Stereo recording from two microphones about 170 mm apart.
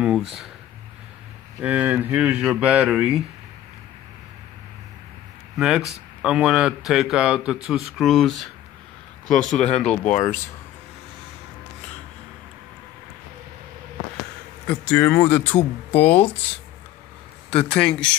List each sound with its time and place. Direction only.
0.0 s speech: centre (ahead or behind)
1.6 s speech: 10° right (ahead or behind)
5.6 s speech: 5° right (ahead or behind)
9.8 s speech: 45° left (ahead or behind)
14.7 s speech: 10° left (ahead or behind)
17.5 s speech: 5° left (ahead or behind)